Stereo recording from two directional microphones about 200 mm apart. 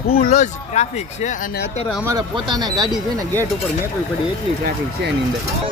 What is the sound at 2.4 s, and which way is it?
Speech, 20° right (ahead or behind).